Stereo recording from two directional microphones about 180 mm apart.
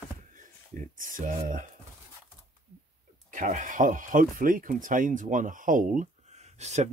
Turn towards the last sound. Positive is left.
turn(degrees=-40)  # may be behind; listen again after turning